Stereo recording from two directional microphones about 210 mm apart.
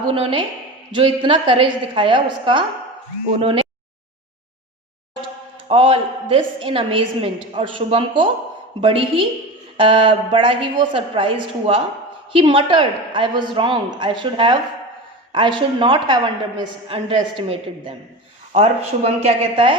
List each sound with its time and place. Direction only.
0.1 s a woman's voice: 25° right (ahead or behind)
5.6 s a woman's voice: 25° right (ahead or behind)